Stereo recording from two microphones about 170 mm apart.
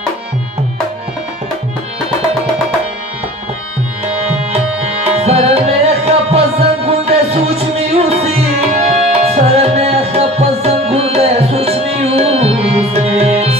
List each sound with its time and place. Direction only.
5.1 s tabla: 40° right (ahead or behind)